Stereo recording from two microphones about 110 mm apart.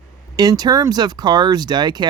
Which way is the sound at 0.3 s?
40° right (ahead or behind).